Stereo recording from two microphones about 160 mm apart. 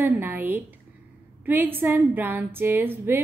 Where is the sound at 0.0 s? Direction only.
10° right (ahead or behind).